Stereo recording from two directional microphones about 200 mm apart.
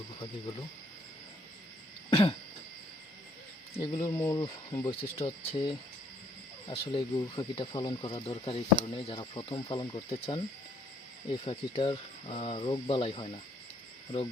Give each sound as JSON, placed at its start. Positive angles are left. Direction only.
{"t": 3.8, "sound": "speech", "side_deg": 15}